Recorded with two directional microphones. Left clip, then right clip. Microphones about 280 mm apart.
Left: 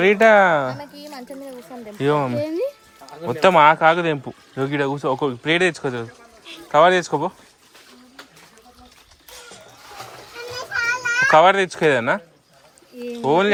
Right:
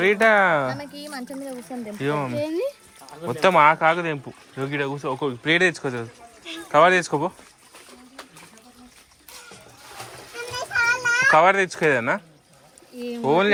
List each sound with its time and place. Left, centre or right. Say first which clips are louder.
0.0 s speech: left 4 dB; left
2.0 s speech: left 5 dB; left
11.2 s speech: left 4 dB; centre
13.2 s speech: left 2 dB; centre